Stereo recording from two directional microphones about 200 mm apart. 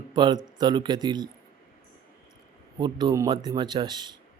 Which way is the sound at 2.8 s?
20° right (ahead or behind).